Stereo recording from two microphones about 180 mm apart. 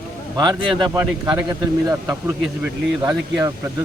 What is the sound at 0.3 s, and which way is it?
Speech, 20° right (ahead or behind).